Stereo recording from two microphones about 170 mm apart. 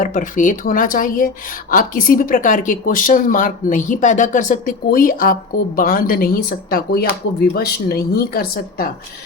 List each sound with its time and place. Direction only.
0.0 s a woman's voice: 50° left (ahead or behind)